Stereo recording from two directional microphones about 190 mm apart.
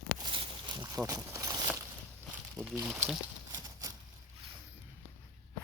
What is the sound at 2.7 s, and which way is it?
Speech, 15° right (ahead or behind).